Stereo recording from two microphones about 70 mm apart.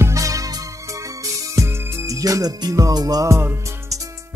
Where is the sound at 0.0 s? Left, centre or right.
Right.